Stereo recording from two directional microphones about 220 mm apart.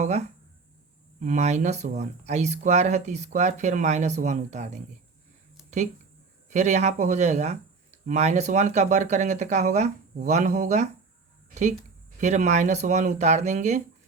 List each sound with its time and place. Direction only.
0.0 s speech: 30° right (ahead or behind)
6.5 s speech: 30° right (ahead or behind)
12.2 s speech: 30° right (ahead or behind)